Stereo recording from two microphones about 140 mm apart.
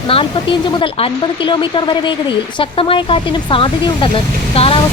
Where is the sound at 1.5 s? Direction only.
35° left (ahead or behind).